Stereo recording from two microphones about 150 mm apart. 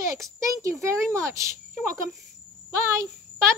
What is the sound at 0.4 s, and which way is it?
A child's voice, 20° right (ahead or behind).